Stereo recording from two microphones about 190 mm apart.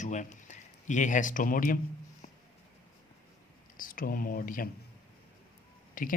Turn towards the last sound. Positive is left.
turn(degrees=45)  # may be behind; listen again after turning